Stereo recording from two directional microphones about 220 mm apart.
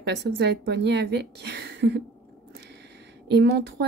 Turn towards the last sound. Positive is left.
turn(degrees=-50)  # may be behind; listen again after turning